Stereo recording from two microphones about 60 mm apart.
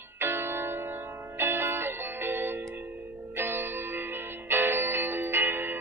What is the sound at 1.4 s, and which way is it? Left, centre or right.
Music, right.